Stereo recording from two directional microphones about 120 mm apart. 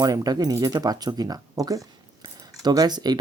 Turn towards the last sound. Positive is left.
turn(degrees=-35)  # may be behind; listen again after turning